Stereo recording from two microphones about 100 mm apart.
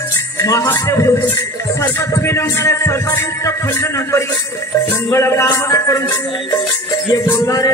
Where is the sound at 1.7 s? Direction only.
25° left (ahead or behind).